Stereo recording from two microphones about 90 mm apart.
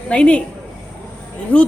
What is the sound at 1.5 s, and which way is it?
Speech, 15° left (ahead or behind).